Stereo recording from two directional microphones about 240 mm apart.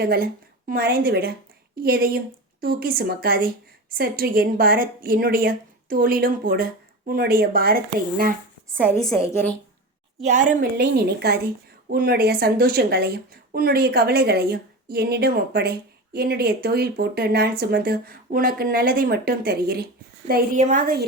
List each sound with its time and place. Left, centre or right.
0.0 s a woman's voice: right
9.0 s a woman's voice: centre
10.2 s a woman's voice: right